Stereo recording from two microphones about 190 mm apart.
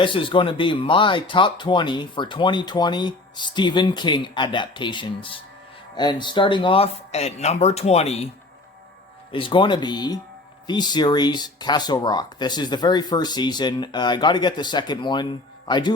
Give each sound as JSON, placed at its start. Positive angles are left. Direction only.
{"t": 0.0, "sound": "speech", "side_deg": 25}
{"t": 9.3, "sound": "speech", "side_deg": 25}